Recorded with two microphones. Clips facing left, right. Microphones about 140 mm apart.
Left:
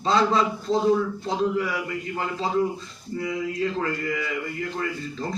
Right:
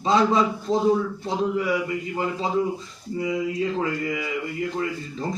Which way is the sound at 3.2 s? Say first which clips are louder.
Right 2 dB; 15° right (ahead or behind).